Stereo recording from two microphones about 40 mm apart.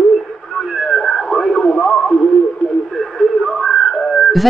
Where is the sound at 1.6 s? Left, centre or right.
Left.